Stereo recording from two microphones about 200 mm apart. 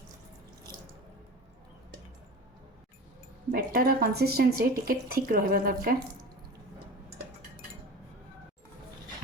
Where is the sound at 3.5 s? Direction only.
50° right (ahead or behind).